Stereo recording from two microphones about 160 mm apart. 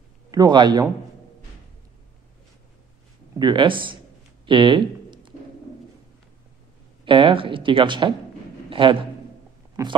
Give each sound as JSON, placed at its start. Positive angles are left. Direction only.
{"t": 0.3, "sound": "speech", "side_deg": -25}
{"t": 3.3, "sound": "speech", "side_deg": -30}
{"t": 4.5, "sound": "a sound", "side_deg": -30}
{"t": 7.1, "sound": "speech", "side_deg": -30}
{"t": 8.6, "sound": "a sound", "side_deg": -30}
{"t": 9.8, "sound": "speech", "side_deg": -20}